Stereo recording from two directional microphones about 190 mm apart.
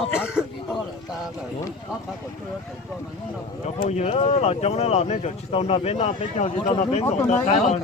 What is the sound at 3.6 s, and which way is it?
Speech, 35° left (ahead or behind).